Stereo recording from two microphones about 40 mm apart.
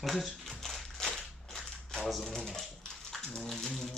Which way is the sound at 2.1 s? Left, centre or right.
Centre.